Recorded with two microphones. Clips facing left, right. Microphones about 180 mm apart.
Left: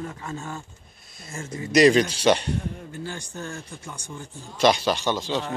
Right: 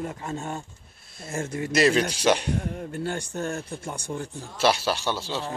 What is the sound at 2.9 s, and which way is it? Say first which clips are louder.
Speech: right 4 dB; 65° right (ahead or behind).